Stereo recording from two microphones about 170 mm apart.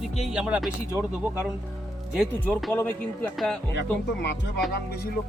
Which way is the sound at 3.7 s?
90° left.